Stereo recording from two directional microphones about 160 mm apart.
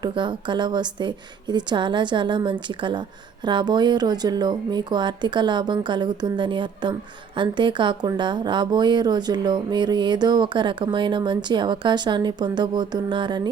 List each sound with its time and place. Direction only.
0.0 s speech: 30° right (ahead or behind)